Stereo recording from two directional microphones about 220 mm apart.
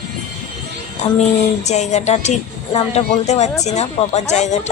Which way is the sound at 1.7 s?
30° left (ahead or behind).